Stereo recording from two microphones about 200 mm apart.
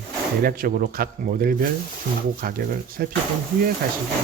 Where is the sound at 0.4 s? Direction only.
45° right (ahead or behind).